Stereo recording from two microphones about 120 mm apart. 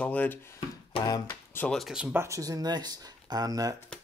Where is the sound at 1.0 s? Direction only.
30° left (ahead or behind).